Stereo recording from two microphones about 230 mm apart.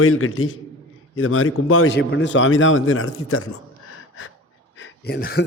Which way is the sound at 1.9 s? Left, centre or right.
Left.